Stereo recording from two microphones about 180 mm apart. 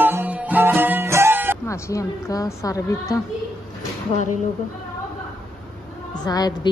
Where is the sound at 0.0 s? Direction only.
10° right (ahead or behind).